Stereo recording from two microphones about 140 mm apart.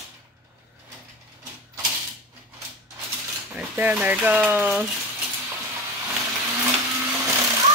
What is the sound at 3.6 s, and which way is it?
A woman's voice, 10° right (ahead or behind).